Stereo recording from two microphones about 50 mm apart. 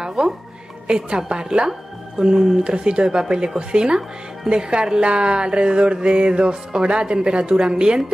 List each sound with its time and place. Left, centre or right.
0.0 s music: centre
0.8 s a woman's voice: centre